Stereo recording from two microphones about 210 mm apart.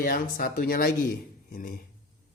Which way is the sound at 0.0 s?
40° left (ahead or behind).